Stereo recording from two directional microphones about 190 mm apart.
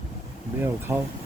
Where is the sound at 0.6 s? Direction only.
10° right (ahead or behind).